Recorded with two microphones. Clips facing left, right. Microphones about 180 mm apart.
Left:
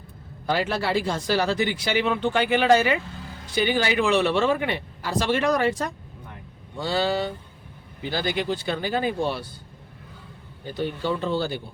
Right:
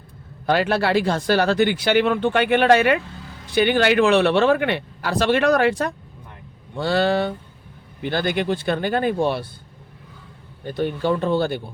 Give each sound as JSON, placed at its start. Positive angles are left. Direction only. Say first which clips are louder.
{"t": 0.4, "sound": "speech", "louder": "right 5 dB", "side_deg": -65}
{"t": 10.7, "sound": "speech", "louder": "right 5 dB", "side_deg": -55}